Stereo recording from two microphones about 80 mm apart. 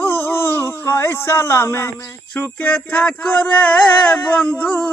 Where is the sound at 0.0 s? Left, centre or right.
Left.